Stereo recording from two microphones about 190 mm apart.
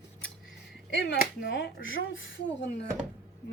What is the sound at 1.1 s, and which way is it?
Speech, 65° left (ahead or behind).